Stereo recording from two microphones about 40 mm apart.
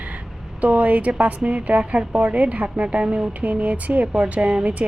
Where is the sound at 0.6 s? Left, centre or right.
Right.